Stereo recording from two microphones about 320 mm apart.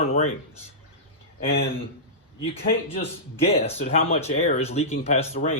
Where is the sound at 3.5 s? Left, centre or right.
Centre.